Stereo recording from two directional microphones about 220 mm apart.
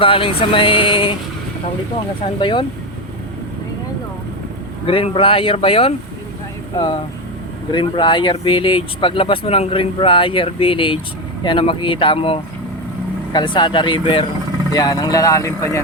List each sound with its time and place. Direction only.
0.0 s speech: 25° left (ahead or behind)
2.4 s speech: 20° left (ahead or behind)
4.9 s speech: 25° left (ahead or behind)